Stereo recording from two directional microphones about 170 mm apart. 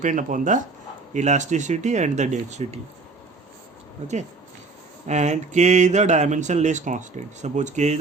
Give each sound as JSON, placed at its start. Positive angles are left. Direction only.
{"t": 0.0, "sound": "speech", "side_deg": -50}
{"t": 4.0, "sound": "speech", "side_deg": -45}